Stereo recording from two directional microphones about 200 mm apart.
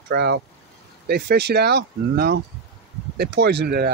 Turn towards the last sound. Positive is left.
turn(degrees=-50)  # may be behind; listen again after turning